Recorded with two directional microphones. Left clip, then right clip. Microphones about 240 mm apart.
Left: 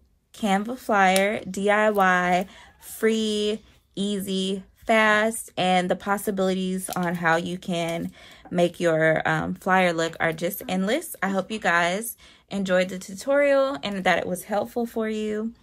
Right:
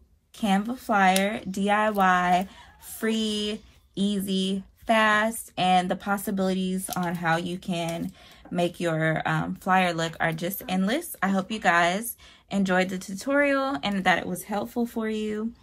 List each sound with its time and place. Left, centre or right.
0.4 s speech: left